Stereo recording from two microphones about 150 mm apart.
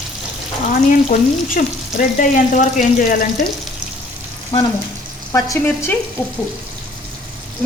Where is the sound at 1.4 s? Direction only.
65° left (ahead or behind).